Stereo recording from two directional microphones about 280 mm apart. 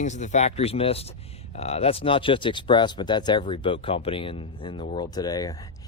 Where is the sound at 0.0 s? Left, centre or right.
Left.